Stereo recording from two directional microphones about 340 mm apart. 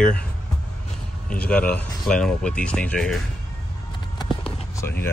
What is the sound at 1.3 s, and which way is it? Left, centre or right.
Speech, centre.